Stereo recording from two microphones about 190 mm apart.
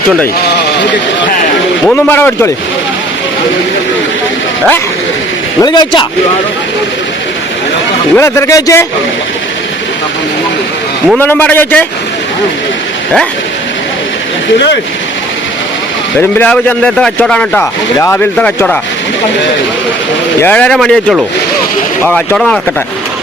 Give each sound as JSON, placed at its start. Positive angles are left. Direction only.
{"t": 1.8, "sound": "speech", "side_deg": 10}
{"t": 5.6, "sound": "speech", "side_deg": 20}
{"t": 8.1, "sound": "speech", "side_deg": 15}
{"t": 11.2, "sound": "speech", "side_deg": 10}
{"t": 16.4, "sound": "speech", "side_deg": 10}
{"t": 20.4, "sound": "speech", "side_deg": 5}